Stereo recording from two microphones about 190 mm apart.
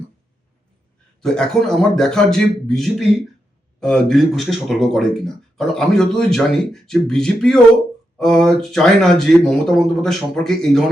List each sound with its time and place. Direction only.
1.2 s speech: 5° left (ahead or behind)